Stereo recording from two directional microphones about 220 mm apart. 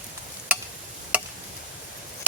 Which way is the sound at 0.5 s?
5° right (ahead or behind).